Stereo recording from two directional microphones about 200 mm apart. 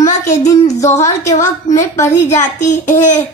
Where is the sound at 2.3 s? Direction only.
35° left (ahead or behind).